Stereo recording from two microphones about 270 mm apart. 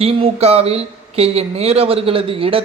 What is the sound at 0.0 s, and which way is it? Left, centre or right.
Speech, right.